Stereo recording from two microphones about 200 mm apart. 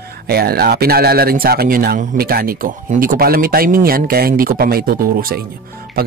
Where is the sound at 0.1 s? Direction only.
50° right (ahead or behind).